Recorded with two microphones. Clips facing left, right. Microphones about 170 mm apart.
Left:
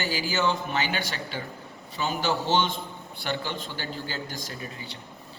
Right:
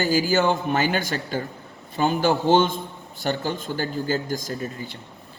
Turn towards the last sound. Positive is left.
turn(degrees=-45)  # may be behind; listen again after turning